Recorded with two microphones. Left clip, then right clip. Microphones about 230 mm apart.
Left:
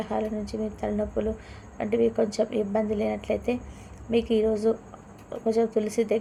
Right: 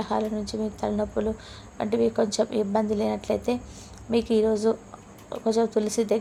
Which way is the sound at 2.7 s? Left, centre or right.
Centre.